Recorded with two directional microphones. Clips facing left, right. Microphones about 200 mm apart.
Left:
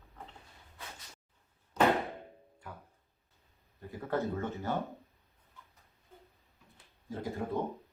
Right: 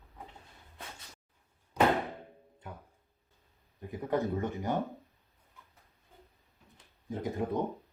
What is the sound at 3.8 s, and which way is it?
Speech, 15° right (ahead or behind).